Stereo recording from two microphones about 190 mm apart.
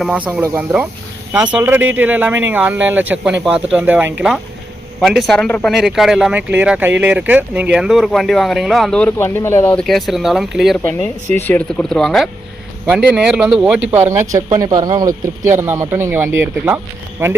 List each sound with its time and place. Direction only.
0.0 s speech: 5° right (ahead or behind)